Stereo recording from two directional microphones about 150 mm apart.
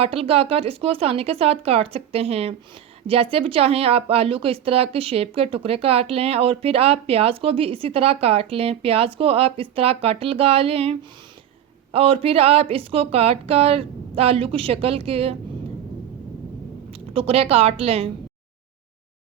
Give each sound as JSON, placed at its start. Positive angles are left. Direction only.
{"t": 0.0, "sound": "a woman's voice", "side_deg": -40}
{"t": 16.9, "sound": "a woman's voice", "side_deg": -40}